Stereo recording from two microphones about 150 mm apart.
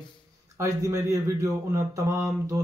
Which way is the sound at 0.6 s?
20° right (ahead or behind).